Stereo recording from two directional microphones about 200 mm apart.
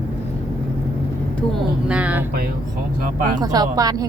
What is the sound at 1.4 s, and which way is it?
Speech, centre (ahead or behind).